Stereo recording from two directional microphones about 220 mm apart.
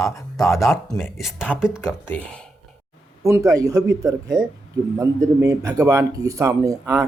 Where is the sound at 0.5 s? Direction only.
10° left (ahead or behind).